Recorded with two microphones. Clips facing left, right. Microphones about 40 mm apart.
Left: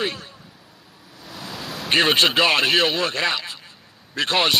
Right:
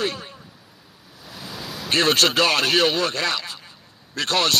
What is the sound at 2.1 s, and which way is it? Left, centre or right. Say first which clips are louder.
Speech: left 1 dB; centre.